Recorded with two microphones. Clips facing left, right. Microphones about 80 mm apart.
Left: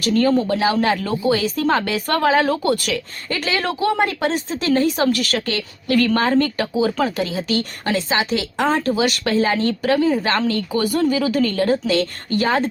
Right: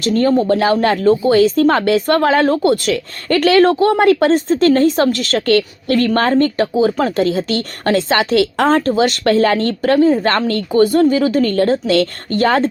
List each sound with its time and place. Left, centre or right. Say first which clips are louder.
0.0 s a woman's voice: right 3 dB; right
3.2 s a woman's voice: right 12 dB; right
4.3 s speech: right 8 dB; right
5.1 s a woman's voice: right 8 dB; right
6.6 s speech: right 5 dB; right
7.0 s a woman's voice: right 6 dB; right
10.7 s speech: right 11 dB; right
11.4 s a woman's voice: right 4 dB; right